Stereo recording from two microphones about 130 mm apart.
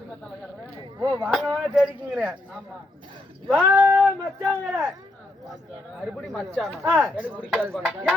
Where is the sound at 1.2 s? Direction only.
Centre (ahead or behind).